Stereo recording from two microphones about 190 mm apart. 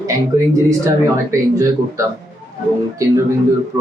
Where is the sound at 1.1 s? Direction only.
15° right (ahead or behind).